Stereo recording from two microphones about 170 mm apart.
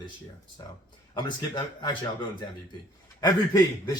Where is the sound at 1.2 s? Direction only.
25° left (ahead or behind).